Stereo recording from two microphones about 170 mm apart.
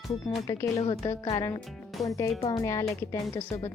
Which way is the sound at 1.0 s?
20° left (ahead or behind).